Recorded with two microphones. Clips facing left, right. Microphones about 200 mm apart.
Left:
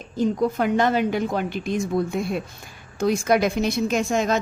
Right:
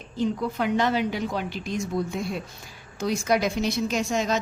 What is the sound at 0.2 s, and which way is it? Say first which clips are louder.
A woman's voice: left 4 dB; 45° left (ahead or behind).